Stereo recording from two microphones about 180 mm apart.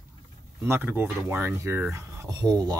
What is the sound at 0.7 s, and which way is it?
Speech, 10° right (ahead or behind).